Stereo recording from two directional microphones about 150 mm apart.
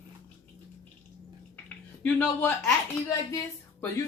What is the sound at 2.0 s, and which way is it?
Speech, 10° left (ahead or behind).